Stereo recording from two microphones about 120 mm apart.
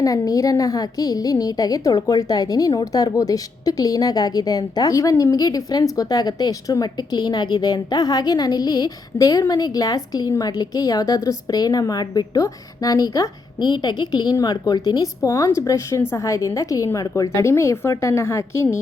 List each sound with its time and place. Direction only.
0.0 s a woman's voice: 30° left (ahead or behind)